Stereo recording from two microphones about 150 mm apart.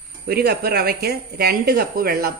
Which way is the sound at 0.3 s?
90° right.